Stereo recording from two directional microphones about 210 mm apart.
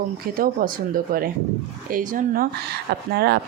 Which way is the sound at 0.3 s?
40° right (ahead or behind).